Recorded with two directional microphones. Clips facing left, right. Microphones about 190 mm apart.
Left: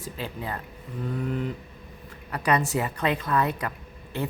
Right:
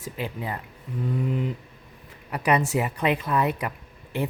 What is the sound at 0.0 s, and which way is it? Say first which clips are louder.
Speech: right 2 dB; 20° right (ahead or behind).